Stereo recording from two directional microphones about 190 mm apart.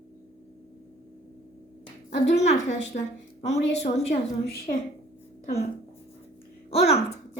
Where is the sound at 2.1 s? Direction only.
35° left (ahead or behind).